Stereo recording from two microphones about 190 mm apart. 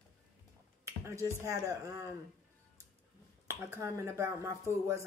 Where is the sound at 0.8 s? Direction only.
15° right (ahead or behind).